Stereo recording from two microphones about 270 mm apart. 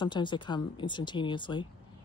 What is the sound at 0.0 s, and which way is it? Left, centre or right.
Speech, centre.